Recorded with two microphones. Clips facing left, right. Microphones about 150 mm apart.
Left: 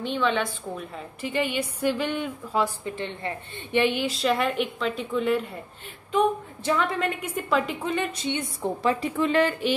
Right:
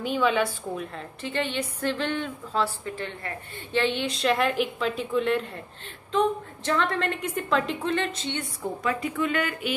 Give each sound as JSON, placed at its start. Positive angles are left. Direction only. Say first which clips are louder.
{"t": 0.0, "sound": "a woman's voice", "louder": "right 1 dB", "side_deg": -5}
{"t": 1.2, "sound": "a woman's voice", "louder": "left 2 dB", "side_deg": 10}
{"t": 8.8, "sound": "a woman's voice", "louder": "left 3 dB", "side_deg": 30}